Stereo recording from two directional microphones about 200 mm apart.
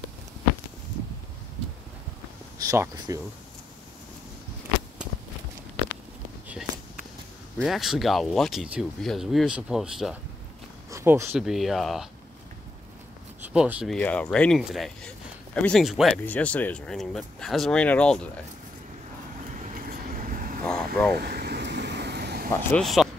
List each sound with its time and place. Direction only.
2.6 s speech: 15° right (ahead or behind)
7.6 s speech: centre (ahead or behind)
10.9 s a sound: 15° right (ahead or behind)
11.3 s speech: centre (ahead or behind)
13.4 s speech: 5° right (ahead or behind)
13.9 s speech: 5° left (ahead or behind)
19.6 s vehicle: 40° right (ahead or behind)
20.6 s vehicle: 5° left (ahead or behind)
21.2 s vehicle: 55° right (ahead or behind)
22.5 s speech: 5° left (ahead or behind)